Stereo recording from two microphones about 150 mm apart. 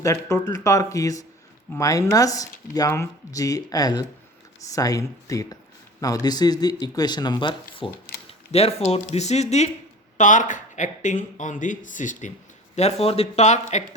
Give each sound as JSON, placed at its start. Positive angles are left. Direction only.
{"t": 0.0, "sound": "speech", "side_deg": 20}
{"t": 12.7, "sound": "speech", "side_deg": 45}